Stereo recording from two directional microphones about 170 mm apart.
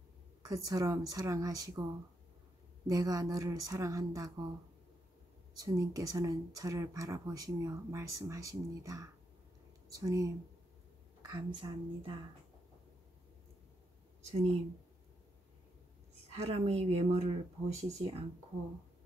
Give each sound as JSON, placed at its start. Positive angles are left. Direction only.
{"t": 0.4, "sound": "speech", "side_deg": -20}
{"t": 2.9, "sound": "speech", "side_deg": -20}
{"t": 5.6, "sound": "speech", "side_deg": -20}
{"t": 16.3, "sound": "speech", "side_deg": -40}